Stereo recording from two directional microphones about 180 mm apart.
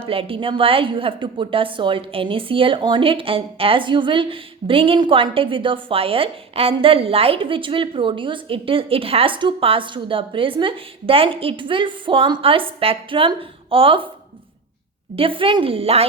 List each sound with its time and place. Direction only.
0.0 s a woman's voice: 30° right (ahead or behind)
15.1 s a woman's voice: 30° right (ahead or behind)